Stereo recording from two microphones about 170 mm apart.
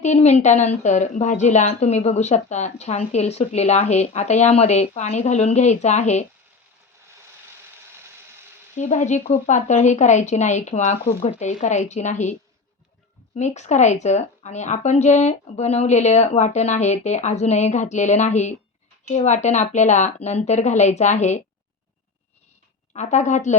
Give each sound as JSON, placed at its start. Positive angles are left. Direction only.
{"t": 0.0, "sound": "a woman's voice", "side_deg": 40}
{"t": 8.7, "sound": "a woman's voice", "side_deg": 45}
{"t": 22.9, "sound": "a woman's voice", "side_deg": 45}